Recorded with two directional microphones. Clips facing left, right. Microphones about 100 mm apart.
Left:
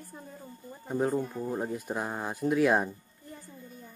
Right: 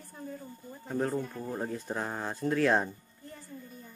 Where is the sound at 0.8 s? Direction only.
10° left (ahead or behind).